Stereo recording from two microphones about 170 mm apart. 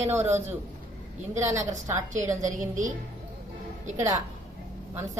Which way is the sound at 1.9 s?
45° right (ahead or behind).